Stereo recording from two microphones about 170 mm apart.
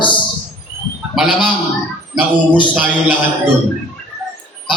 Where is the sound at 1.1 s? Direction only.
5° right (ahead or behind).